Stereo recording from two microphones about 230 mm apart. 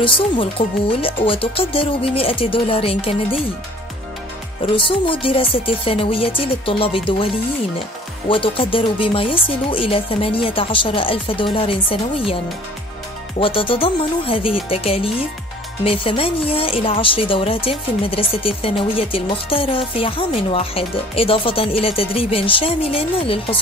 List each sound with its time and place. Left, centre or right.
0.0 s speech: left
4.8 s speech: left
8.3 s speech: left
13.4 s speech: left